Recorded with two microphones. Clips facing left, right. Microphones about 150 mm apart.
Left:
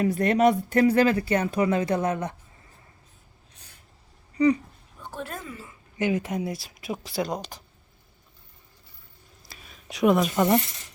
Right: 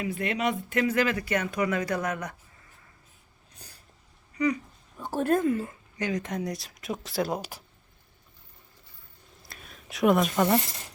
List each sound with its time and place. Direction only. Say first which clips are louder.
0.0 s speech: left 8 dB; 40° left (ahead or behind)
3.5 s a sound: right 4 dB; 35° right (ahead or behind)
4.4 s speech: left 6 dB; 30° left (ahead or behind)
5.0 s speech: right 12 dB; 45° right (ahead or behind)
6.0 s speech: left 4 dB; 10° left (ahead or behind); by 7.6 s 5° right (ahead or behind)
9.5 s a sound: left 2 dB; centre (ahead or behind)